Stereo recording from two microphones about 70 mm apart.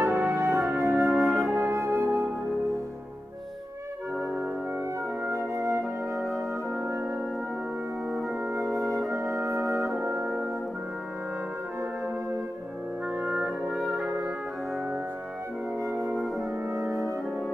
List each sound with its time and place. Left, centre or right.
0.0 s music: right
1.1 s music: centre
1.4 s music: right
5.3 s music: right
8.9 s music: right
9.9 s brass instrument: centre
13.3 s music: centre
15.9 s music: centre